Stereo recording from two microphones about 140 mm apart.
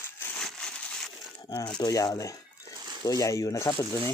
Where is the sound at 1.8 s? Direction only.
25° left (ahead or behind).